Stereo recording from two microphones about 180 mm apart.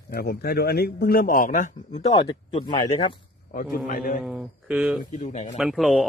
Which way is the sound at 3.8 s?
50° left (ahead or behind).